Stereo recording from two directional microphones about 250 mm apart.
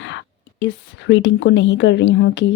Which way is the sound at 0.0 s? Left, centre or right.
Left.